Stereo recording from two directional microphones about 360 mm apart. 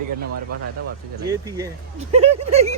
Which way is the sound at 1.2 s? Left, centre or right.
Centre.